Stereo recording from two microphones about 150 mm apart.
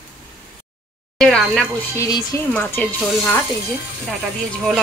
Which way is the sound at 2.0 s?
20° left (ahead or behind).